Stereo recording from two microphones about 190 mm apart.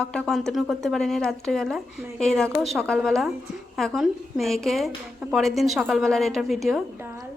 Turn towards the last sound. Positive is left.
turn(degrees=0)  # may be behind; listen again after turning